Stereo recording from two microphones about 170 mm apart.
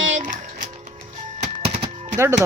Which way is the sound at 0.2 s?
50° right (ahead or behind).